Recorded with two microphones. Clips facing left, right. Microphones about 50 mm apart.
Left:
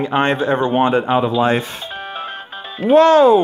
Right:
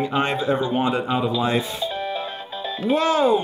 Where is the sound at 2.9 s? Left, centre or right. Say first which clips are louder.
Left 9 dB; left.